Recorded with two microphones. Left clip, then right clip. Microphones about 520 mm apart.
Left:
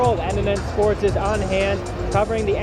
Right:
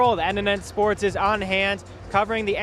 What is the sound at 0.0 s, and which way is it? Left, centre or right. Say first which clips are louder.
Speech: even; right.